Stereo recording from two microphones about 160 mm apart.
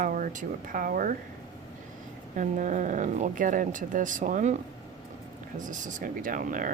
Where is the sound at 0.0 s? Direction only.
55° right (ahead or behind).